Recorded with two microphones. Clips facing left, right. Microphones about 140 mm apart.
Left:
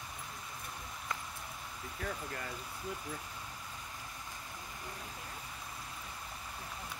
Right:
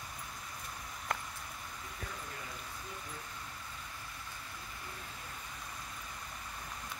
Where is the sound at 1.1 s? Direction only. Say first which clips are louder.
Right 4 dB; 60° right (ahead or behind).